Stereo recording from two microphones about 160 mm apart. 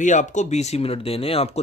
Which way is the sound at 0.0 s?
50° left (ahead or behind).